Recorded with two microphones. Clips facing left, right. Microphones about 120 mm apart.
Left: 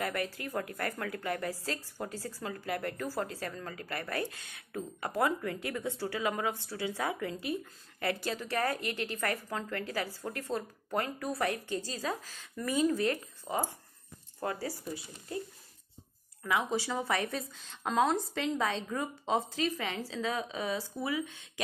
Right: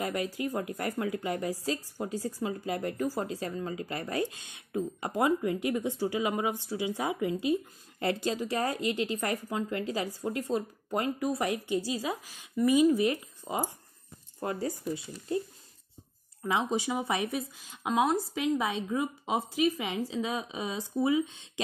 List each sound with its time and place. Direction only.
0.0 s a woman's voice: 15° right (ahead or behind)
16.4 s a woman's voice: 20° right (ahead or behind)